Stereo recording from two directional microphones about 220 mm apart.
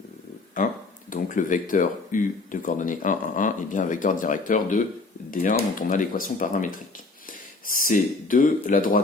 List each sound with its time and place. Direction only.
0.6 s speech: 35° left (ahead or behind)